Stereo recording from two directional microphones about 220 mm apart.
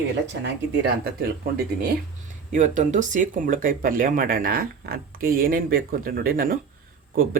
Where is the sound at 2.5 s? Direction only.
35° right (ahead or behind).